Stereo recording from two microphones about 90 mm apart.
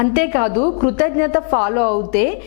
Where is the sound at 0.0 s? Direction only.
15° left (ahead or behind).